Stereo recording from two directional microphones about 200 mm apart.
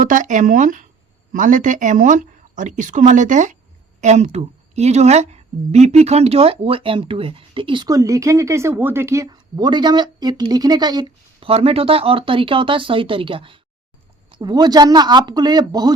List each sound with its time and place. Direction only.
0.0 s a woman's voice: 40° right (ahead or behind); by 15.9 s 20° right (ahead or behind)